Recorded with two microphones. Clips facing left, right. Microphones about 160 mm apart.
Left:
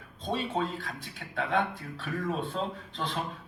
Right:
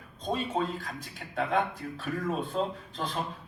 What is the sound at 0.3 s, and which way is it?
A man's voice, 40° right (ahead or behind).